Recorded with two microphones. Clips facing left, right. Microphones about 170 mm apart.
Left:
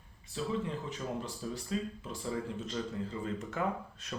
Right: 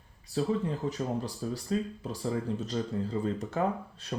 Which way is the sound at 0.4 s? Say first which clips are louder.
Right 6 dB; 35° right (ahead or behind).